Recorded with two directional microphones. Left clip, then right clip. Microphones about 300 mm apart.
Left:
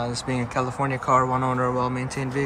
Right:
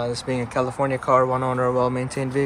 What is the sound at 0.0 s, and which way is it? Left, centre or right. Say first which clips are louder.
Speech: right 2 dB; centre.